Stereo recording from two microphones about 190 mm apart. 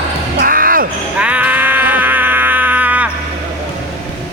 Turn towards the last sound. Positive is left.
turn(degrees=-10)  # may be behind; listen again after turning